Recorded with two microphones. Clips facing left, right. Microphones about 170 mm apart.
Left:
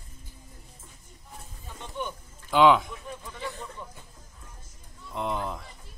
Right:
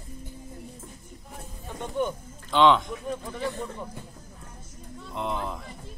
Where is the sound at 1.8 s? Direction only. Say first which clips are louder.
Right 7 dB; 45° right (ahead or behind).